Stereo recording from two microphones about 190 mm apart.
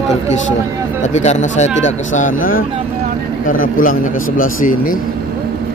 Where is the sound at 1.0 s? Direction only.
35° left (ahead or behind).